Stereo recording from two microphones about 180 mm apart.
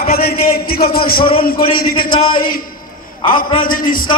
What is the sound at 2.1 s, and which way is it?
Speech, 30° left (ahead or behind).